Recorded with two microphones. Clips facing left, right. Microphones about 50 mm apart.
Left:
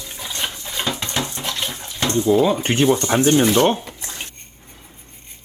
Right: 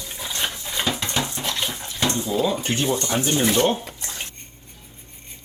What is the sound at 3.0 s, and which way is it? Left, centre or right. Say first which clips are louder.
Speech: left 5 dB; left.